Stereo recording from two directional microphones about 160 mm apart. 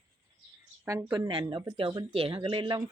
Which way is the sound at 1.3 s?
30° right (ahead or behind).